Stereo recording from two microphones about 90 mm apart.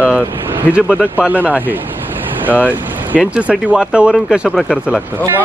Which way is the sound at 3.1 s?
5° right (ahead or behind).